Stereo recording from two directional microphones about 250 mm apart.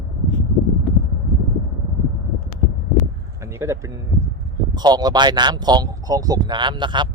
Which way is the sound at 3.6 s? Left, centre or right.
Centre.